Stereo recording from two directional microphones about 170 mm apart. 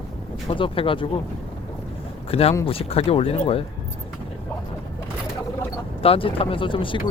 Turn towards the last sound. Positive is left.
turn(degrees=30)  # may be behind; listen again after turning